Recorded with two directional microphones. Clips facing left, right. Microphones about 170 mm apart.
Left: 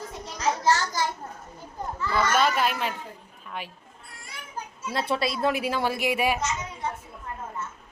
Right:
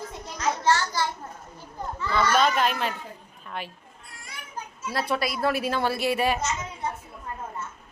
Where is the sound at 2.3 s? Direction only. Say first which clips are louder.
Right 2 dB; 10° left (ahead or behind).